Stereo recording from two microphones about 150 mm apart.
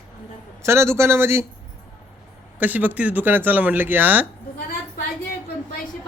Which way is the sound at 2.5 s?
10° right (ahead or behind).